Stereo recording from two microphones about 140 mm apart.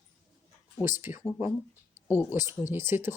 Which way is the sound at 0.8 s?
15° right (ahead or behind).